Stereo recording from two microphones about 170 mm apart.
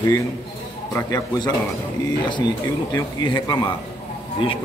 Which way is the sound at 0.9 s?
20° left (ahead or behind).